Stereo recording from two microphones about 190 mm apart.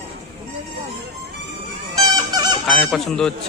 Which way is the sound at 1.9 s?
20° right (ahead or behind).